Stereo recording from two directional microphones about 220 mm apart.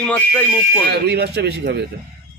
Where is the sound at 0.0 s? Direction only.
5° left (ahead or behind).